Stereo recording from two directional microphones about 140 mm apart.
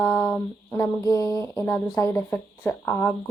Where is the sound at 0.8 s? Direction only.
25° left (ahead or behind).